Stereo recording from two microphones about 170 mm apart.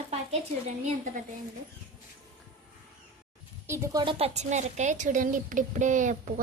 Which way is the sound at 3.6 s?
15° right (ahead or behind).